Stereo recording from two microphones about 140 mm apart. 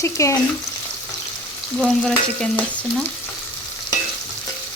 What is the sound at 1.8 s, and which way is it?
Stir, 5° left (ahead or behind).